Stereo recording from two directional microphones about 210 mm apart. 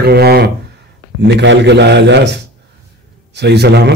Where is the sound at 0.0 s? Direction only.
50° right (ahead or behind).